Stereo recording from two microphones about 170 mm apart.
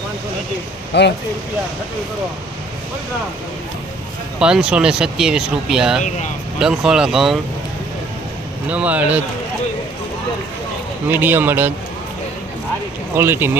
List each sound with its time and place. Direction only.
0.9 s speech: 90° left
4.4 s speech: 5° right (ahead or behind)
6.0 s speech: 45° left (ahead or behind)
6.6 s speech: 5° right (ahead or behind)
8.7 s speech: 10° right (ahead or behind)
11.1 s speech: 10° right (ahead or behind)
13.1 s speech: 15° right (ahead or behind)